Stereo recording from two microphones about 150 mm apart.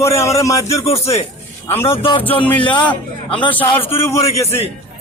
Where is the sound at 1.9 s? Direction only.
35° left (ahead or behind).